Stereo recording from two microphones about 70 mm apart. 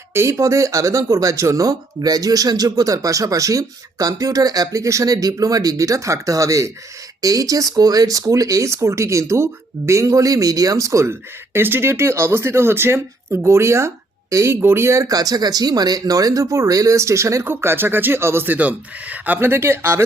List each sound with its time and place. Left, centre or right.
0.1 s speech: right
7.2 s speech: right
11.1 s speech: right
14.4 s speech: right
15.0 s speech: right
17.4 s speech: right